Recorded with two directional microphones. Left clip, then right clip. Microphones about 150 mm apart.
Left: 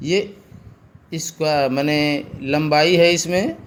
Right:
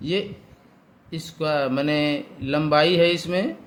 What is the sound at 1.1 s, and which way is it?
Speech, 30° left (ahead or behind).